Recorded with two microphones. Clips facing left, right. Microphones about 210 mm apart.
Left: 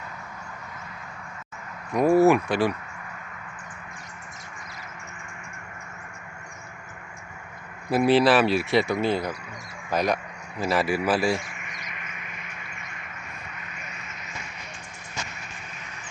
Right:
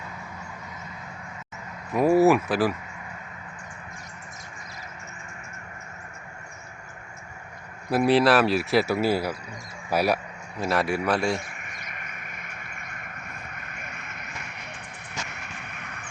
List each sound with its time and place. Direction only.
1.9 s speech: centre (ahead or behind)
7.9 s speech: centre (ahead or behind)
10.6 s speech: centre (ahead or behind)
11.5 s a sound: 50° right (ahead or behind)
15.6 s vehicle: 60° right (ahead or behind)